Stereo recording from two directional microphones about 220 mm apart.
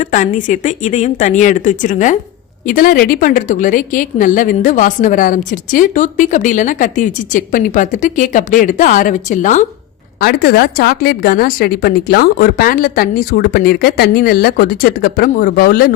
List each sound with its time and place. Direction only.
0.0 s a woman's voice: 35° left (ahead or behind)